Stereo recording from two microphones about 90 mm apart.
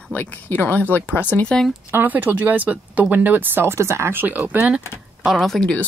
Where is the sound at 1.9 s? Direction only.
20° right (ahead or behind).